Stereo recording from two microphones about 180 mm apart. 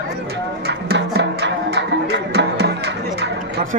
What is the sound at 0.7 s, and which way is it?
Music, 65° right (ahead or behind).